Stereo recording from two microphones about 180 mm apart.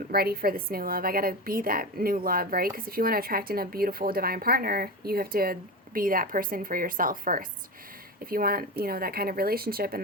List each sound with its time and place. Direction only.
0.1 s a woman's voice: 55° right (ahead or behind)